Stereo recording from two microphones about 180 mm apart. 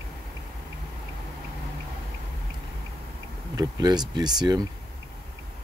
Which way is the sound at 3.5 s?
20° right (ahead or behind).